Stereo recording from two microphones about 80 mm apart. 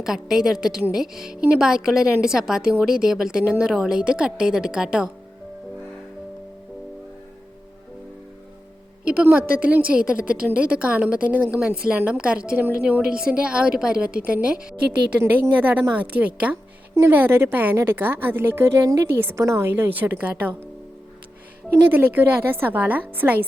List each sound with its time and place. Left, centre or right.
0.0 s a woman's voice: centre
9.2 s a woman's voice: centre
21.9 s a woman's voice: right